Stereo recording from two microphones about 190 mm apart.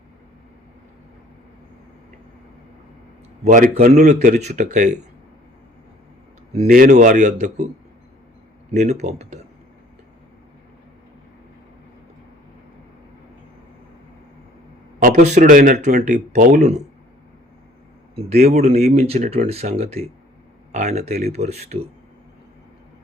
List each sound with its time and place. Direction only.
3.8 s speech: 40° right (ahead or behind)
6.7 s speech: 45° right (ahead or behind)
8.7 s speech: 35° right (ahead or behind)
14.9 s speech: 40° right (ahead or behind)
18.1 s speech: 35° right (ahead or behind)